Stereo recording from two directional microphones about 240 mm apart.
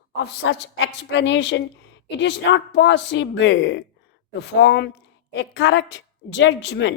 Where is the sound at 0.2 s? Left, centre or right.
Left.